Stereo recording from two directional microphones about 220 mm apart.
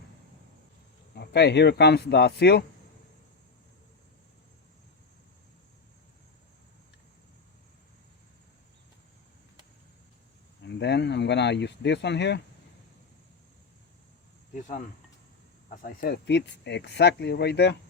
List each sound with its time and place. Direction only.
1.1 s speech: 50° left (ahead or behind)
10.6 s a sound: 50° left (ahead or behind)
15.7 s speech: 40° left (ahead or behind)